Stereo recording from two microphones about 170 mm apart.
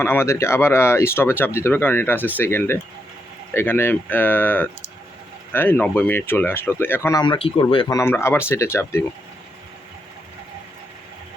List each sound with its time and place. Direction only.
0.0 s speech: 15° left (ahead or behind)
7.2 s speech: 30° left (ahead or behind)
7.9 s speech: 15° left (ahead or behind)